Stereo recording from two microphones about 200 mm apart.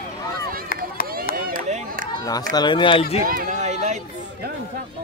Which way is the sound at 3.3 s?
40° right (ahead or behind).